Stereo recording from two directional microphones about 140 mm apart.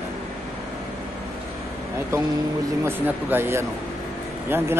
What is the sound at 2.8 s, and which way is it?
A man's voice, 15° right (ahead or behind).